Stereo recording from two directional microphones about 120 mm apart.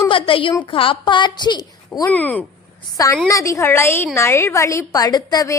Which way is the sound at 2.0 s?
15° left (ahead or behind).